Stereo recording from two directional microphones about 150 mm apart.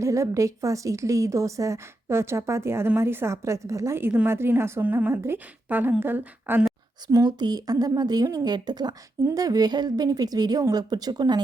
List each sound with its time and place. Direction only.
0.0 s a woman's voice: 20° right (ahead or behind)
7.1 s a woman's voice: 25° right (ahead or behind)